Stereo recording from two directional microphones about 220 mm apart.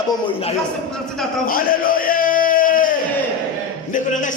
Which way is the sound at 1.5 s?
40° left (ahead or behind).